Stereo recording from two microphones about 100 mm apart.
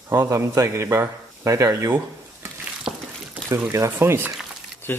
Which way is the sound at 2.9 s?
40° right (ahead or behind).